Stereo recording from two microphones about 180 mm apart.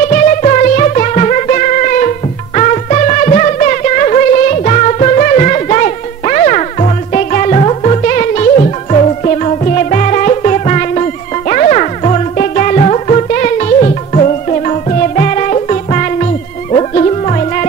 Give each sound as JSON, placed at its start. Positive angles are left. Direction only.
{"t": 0.0, "sound": "music", "side_deg": 45}